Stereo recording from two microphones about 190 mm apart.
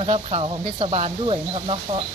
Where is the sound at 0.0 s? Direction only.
30° right (ahead or behind).